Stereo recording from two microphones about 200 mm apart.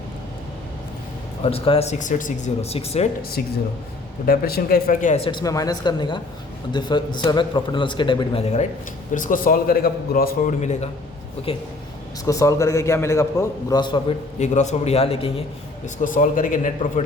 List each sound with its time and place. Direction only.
1.5 s speech: 30° left (ahead or behind)
3.4 s a man's voice: 45° left (ahead or behind); by 8.6 s 30° left (ahead or behind)
9.1 s a man's voice: 40° left (ahead or behind)
12.2 s a man's voice: 15° left (ahead or behind)
14.3 s speech: 35° left (ahead or behind)
16.0 s speech: 40° left (ahead or behind)